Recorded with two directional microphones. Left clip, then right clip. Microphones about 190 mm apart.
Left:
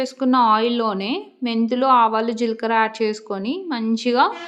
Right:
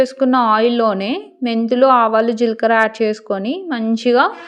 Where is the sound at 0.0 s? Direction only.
20° right (ahead or behind).